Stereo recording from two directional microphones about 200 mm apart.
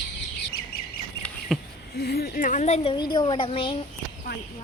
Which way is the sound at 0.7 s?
50° left (ahead or behind).